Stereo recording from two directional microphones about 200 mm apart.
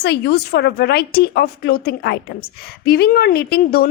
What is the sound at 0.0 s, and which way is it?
A woman's voice, 55° left (ahead or behind).